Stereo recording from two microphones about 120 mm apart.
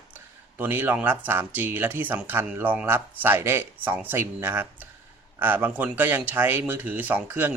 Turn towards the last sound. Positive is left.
turn(degrees=-15)  # may be behind; listen again after turning